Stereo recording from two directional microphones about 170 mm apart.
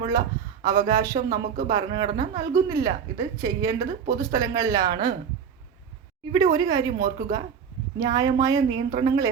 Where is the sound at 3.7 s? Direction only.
60° right (ahead or behind).